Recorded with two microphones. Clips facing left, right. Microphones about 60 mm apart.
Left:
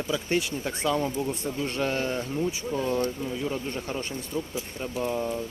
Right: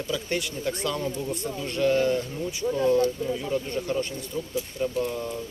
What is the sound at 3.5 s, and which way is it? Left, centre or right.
Speech, centre.